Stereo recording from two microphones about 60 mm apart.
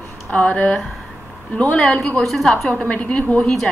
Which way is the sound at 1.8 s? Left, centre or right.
Centre.